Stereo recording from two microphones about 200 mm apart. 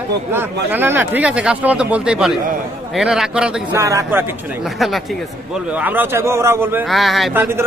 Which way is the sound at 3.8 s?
15° right (ahead or behind).